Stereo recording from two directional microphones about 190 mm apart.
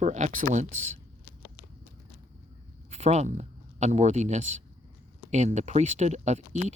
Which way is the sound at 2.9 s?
35° right (ahead or behind).